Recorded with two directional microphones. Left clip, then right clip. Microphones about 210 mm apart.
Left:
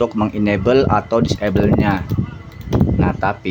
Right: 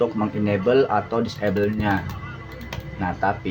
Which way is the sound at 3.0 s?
45° left (ahead or behind).